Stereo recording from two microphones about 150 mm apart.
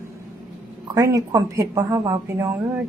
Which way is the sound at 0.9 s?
25° right (ahead or behind).